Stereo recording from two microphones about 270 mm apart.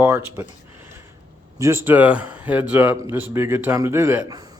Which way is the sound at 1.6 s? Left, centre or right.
Centre.